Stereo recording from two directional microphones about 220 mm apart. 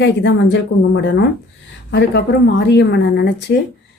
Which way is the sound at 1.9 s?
50° left (ahead or behind).